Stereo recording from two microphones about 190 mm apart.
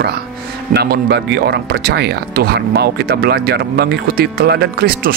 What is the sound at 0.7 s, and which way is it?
Speech, 60° right (ahead or behind).